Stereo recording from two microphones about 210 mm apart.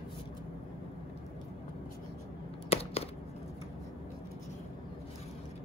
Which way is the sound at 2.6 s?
30° left (ahead or behind).